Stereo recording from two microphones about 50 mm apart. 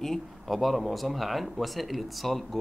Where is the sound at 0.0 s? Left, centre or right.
Centre.